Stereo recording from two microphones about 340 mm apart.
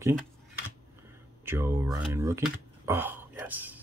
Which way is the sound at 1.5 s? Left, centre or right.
Centre.